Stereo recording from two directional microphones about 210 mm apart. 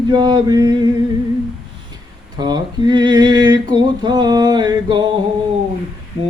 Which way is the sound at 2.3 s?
20° right (ahead or behind).